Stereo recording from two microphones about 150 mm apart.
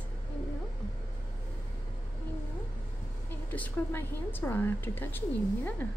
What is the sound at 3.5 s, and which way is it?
Speech, 15° left (ahead or behind).